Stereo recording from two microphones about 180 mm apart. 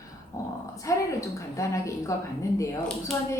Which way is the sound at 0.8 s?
15° left (ahead or behind).